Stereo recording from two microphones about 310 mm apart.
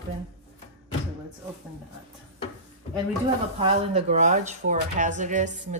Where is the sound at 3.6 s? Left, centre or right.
Right.